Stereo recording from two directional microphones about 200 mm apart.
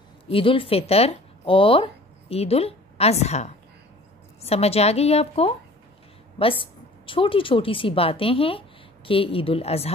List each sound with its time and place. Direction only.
0.3 s a woman's voice: 25° left (ahead or behind)